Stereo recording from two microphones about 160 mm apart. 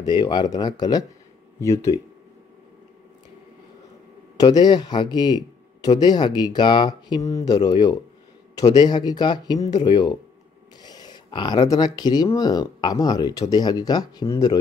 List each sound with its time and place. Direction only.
0.0 s speech: 25° left (ahead or behind)
4.4 s speech: 25° left (ahead or behind)